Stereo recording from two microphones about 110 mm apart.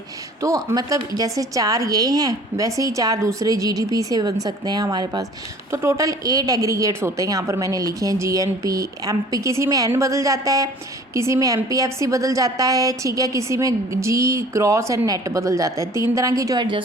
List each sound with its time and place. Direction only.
0.4 s a woman's voice: 30° right (ahead or behind)
5.7 s a woman's voice: 30° right (ahead or behind)